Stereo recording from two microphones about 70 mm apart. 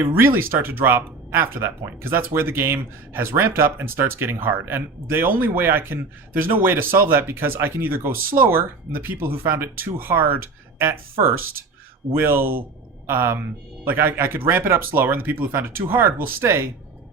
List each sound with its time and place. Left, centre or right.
0.0 s speech: right